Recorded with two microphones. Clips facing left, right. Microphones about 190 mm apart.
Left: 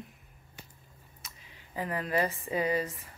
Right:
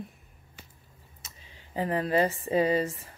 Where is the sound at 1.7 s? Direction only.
30° right (ahead or behind).